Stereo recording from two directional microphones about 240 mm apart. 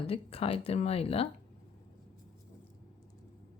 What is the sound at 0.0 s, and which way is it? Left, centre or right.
A woman's voice, left.